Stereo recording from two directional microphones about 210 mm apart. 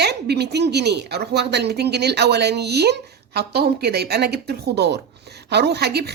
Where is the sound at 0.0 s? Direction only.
50° right (ahead or behind).